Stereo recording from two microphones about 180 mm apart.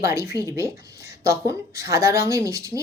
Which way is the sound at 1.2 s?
20° right (ahead or behind).